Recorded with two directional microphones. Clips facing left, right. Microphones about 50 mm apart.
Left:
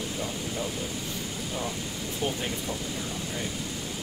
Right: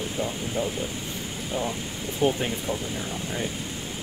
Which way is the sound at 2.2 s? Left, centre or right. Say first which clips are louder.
Right 8 dB; right.